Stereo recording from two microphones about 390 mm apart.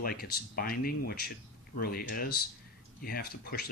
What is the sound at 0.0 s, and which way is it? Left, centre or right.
Speech, left.